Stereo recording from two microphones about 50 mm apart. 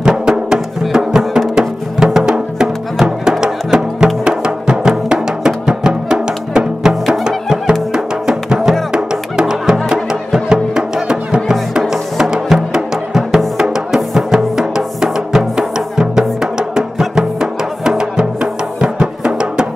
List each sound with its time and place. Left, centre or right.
0.0 s music: centre